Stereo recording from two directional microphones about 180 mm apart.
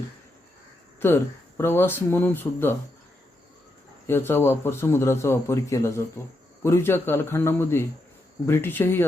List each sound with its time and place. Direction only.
0.9 s a man's voice: 15° left (ahead or behind)
4.0 s a man's voice: 15° left (ahead or behind)